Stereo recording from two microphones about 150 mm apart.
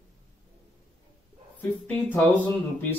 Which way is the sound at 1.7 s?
15° left (ahead or behind).